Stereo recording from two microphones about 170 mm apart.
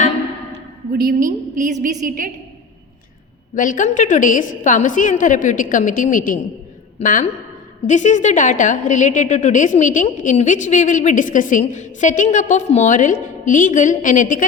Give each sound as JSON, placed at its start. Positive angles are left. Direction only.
{"t": 0.9, "sound": "a woman's voice", "side_deg": -55}
{"t": 3.5, "sound": "a woman's voice", "side_deg": 50}